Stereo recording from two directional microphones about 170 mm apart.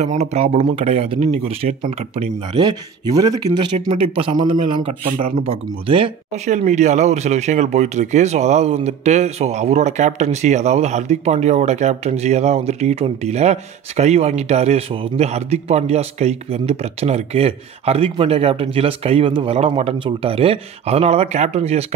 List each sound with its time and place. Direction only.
0.0 s speech: 40° right (ahead or behind); by 3.6 s 20° right (ahead or behind)
3.9 s speech: 35° right (ahead or behind)